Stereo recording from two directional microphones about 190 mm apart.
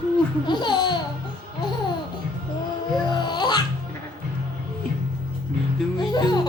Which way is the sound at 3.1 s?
25° left (ahead or behind).